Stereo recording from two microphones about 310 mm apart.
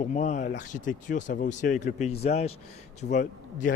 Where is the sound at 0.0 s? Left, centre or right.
Left.